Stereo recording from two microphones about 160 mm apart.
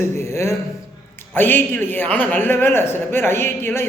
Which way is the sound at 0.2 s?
15° left (ahead or behind).